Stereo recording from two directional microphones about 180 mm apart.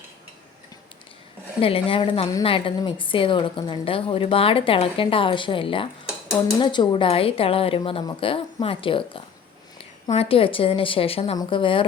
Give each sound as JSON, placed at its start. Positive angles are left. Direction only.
{"t": 1.6, "sound": "a woman's voice", "side_deg": 30}